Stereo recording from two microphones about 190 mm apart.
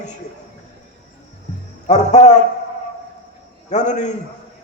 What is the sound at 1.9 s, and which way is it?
Speech, 40° left (ahead or behind).